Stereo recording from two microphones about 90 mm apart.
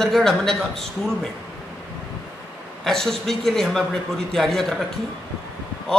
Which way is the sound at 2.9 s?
5° left (ahead or behind).